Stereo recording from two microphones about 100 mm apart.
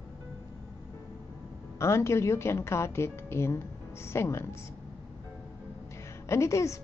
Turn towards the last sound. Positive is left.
turn(degrees=30)  # may be behind; listen again after turning